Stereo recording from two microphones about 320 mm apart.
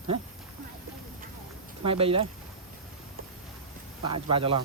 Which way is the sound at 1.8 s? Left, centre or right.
Centre.